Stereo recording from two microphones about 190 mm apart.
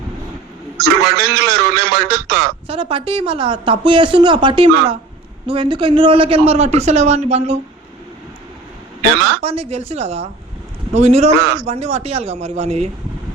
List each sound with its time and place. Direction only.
0.8 s a man's voice: 60° right (ahead or behind)
2.6 s a man's voice: 30° right (ahead or behind)
9.4 s a man's voice: 30° right (ahead or behind)